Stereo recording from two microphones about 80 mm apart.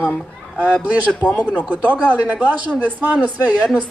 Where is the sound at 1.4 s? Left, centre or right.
Centre.